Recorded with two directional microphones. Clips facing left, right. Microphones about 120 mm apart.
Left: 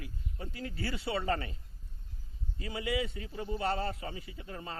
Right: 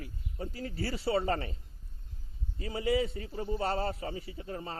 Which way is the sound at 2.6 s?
35° right (ahead or behind).